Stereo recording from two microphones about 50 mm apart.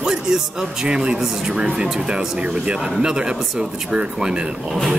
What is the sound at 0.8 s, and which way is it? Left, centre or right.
A man's voice, centre.